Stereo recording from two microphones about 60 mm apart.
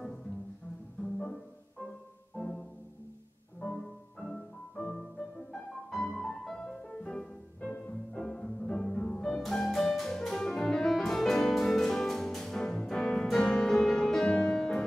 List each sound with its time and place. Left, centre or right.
2.3 s music: centre
3.6 s music: centre